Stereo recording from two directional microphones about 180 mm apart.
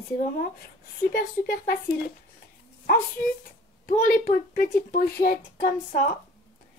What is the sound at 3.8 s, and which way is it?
Speech, 50° left (ahead or behind).